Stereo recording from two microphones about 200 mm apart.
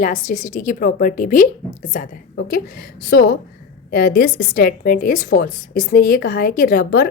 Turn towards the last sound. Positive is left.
turn(degrees=50)  # may be behind; listen again after turning